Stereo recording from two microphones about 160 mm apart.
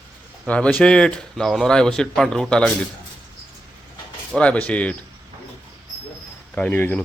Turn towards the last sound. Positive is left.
turn(degrees=10)  # may be behind; listen again after turning